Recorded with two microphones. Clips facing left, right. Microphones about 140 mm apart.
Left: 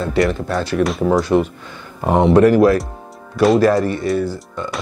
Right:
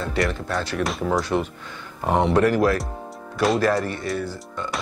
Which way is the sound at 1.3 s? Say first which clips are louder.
Left 8 dB; 50° left (ahead or behind).